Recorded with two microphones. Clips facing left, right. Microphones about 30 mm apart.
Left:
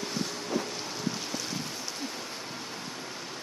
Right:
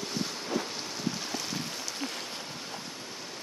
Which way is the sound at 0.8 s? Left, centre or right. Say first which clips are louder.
Left 1 dB; centre.